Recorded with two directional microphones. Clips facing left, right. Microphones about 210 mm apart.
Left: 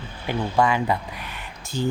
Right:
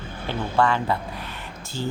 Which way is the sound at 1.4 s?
15° left (ahead or behind).